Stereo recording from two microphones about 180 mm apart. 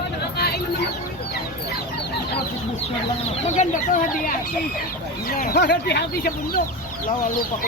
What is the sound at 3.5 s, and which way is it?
Speech, 45° left (ahead or behind).